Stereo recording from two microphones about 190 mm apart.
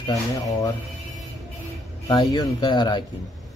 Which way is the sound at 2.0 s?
20° left (ahead or behind).